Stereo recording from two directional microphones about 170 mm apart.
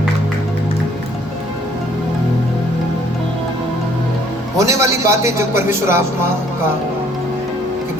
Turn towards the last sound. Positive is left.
turn(degrees=-15)  # may be behind; listen again after turning